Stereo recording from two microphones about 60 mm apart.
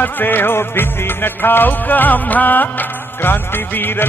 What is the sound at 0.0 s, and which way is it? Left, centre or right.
Music, left.